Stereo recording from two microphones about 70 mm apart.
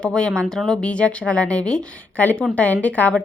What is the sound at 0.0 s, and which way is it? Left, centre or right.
A woman's voice, centre.